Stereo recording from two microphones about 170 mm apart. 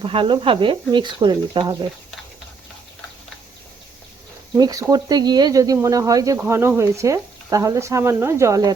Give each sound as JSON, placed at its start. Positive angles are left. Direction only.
{"t": 0.0, "sound": "speech", "side_deg": -30}
{"t": 4.5, "sound": "speech", "side_deg": -20}